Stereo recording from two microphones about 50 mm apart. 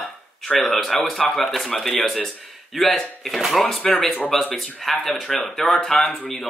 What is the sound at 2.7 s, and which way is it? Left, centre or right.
Speech, centre.